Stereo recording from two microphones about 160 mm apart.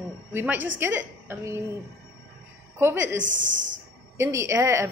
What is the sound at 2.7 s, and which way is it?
A woman's voice, 15° right (ahead or behind).